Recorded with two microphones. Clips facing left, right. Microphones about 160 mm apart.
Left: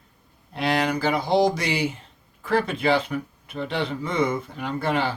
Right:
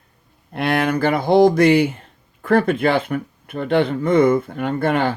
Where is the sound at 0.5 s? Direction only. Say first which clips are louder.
Right 4 dB; 55° right (ahead or behind).